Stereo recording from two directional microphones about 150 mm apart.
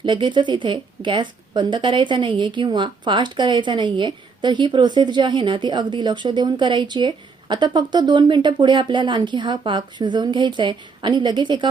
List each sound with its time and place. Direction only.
0.0 s a woman's voice: 30° right (ahead or behind)